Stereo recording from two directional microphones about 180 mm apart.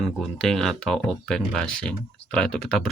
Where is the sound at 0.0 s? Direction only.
Centre (ahead or behind).